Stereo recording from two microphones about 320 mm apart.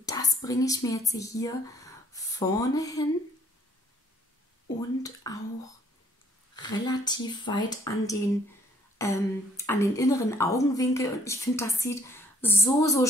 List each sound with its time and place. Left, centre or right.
0.0 s speech: centre
4.7 s speech: centre
6.5 s speech: centre
8.9 s a sound: centre
9.7 s speech: centre